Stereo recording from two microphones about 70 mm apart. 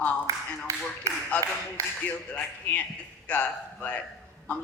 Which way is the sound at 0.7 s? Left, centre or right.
Right.